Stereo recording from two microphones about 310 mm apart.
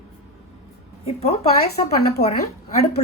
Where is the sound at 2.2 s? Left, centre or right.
Left.